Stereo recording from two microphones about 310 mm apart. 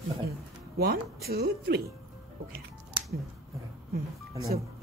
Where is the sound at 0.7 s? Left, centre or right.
Right.